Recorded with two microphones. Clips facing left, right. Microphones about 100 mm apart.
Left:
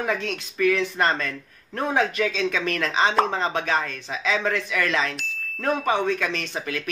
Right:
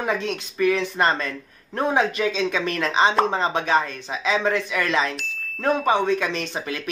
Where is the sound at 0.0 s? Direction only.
15° right (ahead or behind).